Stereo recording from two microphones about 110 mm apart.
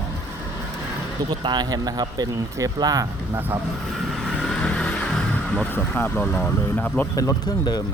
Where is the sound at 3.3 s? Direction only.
20° right (ahead or behind).